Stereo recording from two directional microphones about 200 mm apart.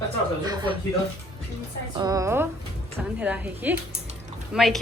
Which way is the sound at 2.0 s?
15° right (ahead or behind).